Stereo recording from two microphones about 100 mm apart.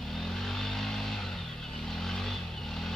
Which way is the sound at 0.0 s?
5° left (ahead or behind).